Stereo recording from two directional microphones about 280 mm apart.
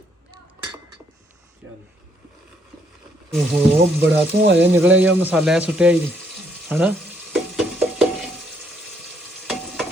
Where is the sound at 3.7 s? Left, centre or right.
Right.